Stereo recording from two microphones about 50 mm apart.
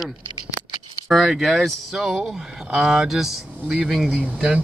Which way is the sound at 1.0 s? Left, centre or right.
Centre.